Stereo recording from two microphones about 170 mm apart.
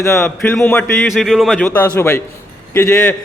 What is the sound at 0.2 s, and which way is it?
A man's voice, 5° left (ahead or behind).